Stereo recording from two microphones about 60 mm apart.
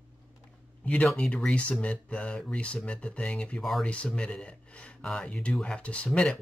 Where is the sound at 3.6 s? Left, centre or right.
Centre.